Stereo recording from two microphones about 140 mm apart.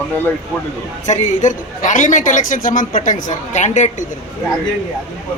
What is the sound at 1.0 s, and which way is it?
A man's voice, 60° left (ahead or behind).